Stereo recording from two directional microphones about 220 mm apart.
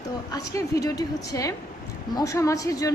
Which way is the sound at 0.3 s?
15° left (ahead or behind).